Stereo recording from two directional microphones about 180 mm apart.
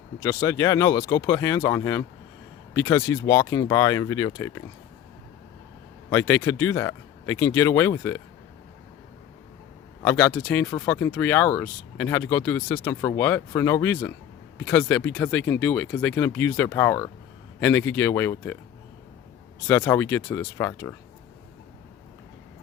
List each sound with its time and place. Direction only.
0.2 s speech: 15° left (ahead or behind)
6.1 s speech: 15° left (ahead or behind)
10.0 s speech: 15° left (ahead or behind)
19.6 s speech: 15° left (ahead or behind)